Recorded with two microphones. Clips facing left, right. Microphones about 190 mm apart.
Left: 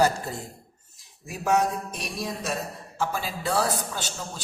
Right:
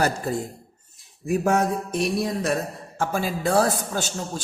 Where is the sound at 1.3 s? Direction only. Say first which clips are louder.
Right 3 dB; 50° right (ahead or behind).